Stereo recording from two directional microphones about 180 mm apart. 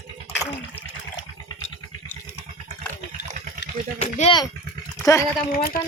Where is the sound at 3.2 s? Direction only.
45° right (ahead or behind).